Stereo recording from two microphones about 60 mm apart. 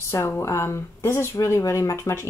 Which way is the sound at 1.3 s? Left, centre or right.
Left.